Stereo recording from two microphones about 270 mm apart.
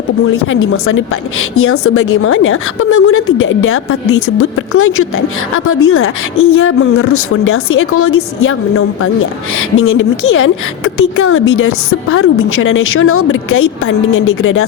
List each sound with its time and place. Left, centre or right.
0.4 s a woman's voice: left